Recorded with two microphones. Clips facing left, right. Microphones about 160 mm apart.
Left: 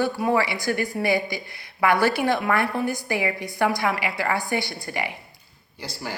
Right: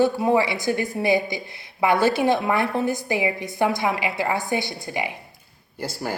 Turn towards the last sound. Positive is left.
turn(degrees=-50)  # may be behind; listen again after turning